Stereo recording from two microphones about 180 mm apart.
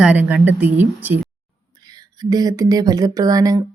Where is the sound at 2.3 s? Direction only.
20° right (ahead or behind).